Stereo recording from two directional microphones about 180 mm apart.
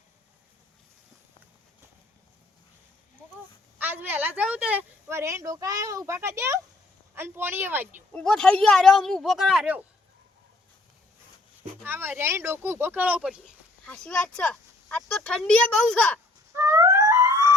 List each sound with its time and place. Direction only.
3.8 s a sound: 10° right (ahead or behind)
7.2 s speech: 10° right (ahead or behind)
8.1 s speech: 5° left (ahead or behind)
11.8 s speech: 10° right (ahead or behind)
13.8 s speech: 5° left (ahead or behind)
16.6 s music: 15° right (ahead or behind)